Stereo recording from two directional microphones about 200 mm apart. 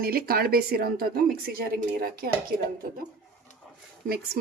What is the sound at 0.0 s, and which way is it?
Speech, 50° right (ahead or behind).